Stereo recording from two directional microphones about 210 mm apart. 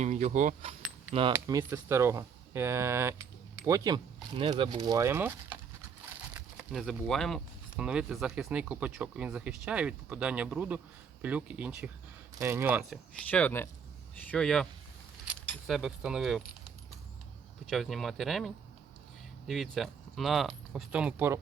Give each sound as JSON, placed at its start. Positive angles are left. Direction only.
{"t": 0.0, "sound": "speech", "side_deg": -35}
{"t": 0.8, "sound": "a sound", "side_deg": -5}
{"t": 1.3, "sound": "speech", "side_deg": -15}
{"t": 13.3, "sound": "speech", "side_deg": 10}
{"t": 17.7, "sound": "speech", "side_deg": 0}